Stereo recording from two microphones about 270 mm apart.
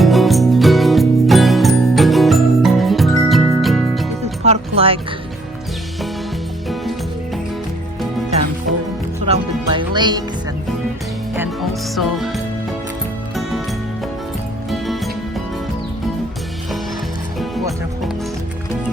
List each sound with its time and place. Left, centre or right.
0.0 s music: centre
4.4 s music: right
9.2 s music: centre
11.3 s music: centre
17.4 s music: centre